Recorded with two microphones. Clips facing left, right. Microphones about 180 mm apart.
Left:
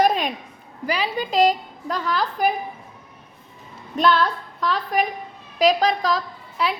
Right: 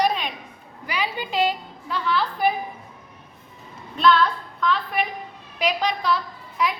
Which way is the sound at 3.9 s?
40° left (ahead or behind).